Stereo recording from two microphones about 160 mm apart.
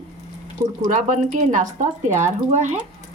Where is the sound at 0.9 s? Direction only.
50° right (ahead or behind).